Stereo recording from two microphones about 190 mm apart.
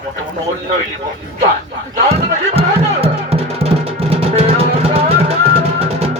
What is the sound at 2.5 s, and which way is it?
Music, 30° right (ahead or behind).